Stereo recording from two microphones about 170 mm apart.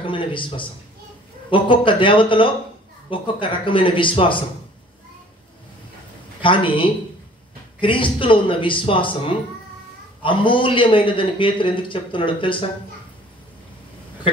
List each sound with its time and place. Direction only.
0.0 s a man's voice: 30° left (ahead or behind)
6.4 s a man's voice: 30° left (ahead or behind)
14.3 s a sound: 30° left (ahead or behind)